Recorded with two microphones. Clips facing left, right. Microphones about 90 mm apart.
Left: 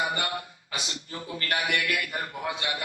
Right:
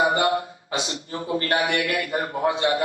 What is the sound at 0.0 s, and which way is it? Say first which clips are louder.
A man's voice: right 9 dB; 35° right (ahead or behind).